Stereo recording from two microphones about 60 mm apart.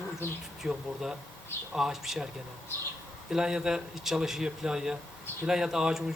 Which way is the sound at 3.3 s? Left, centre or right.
Centre.